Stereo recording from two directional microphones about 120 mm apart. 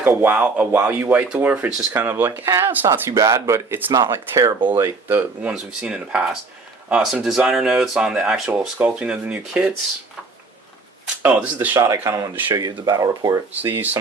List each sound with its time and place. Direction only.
0.0 s speech: 15° right (ahead or behind)
3.9 s speech: 30° right (ahead or behind); by 9.7 s 10° right (ahead or behind)
11.2 s speech: 10° right (ahead or behind)
12.0 s speech: 25° right (ahead or behind)
13.5 s speech: 15° right (ahead or behind)